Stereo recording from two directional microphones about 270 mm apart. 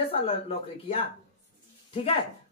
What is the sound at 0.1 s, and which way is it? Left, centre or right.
Speech, left.